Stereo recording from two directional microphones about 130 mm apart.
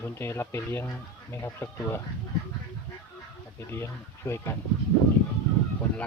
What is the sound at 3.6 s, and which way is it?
Speech, 20° left (ahead or behind).